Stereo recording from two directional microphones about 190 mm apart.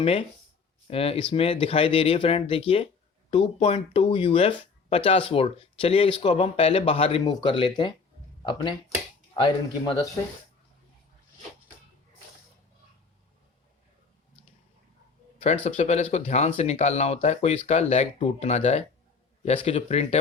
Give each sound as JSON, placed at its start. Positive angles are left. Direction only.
{"t": 0.0, "sound": "speech", "side_deg": 30}
{"t": 15.4, "sound": "speech", "side_deg": 35}